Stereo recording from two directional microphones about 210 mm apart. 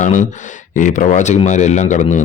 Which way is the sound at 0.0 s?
35° left (ahead or behind).